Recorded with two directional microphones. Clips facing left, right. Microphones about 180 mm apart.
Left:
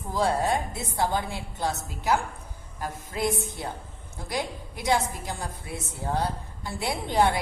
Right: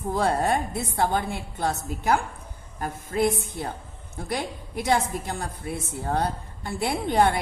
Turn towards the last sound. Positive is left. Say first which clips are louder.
# right 2 dB
turn(degrees=-55)  # may be behind; listen again after turning